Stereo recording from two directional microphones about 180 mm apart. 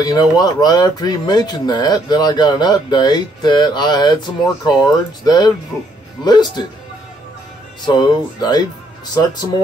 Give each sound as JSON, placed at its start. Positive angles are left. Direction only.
{"t": 0.0, "sound": "speech", "side_deg": 20}
{"t": 7.8, "sound": "speech", "side_deg": 25}